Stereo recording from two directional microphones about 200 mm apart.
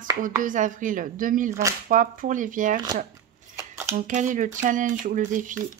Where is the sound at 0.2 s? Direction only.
40° right (ahead or behind).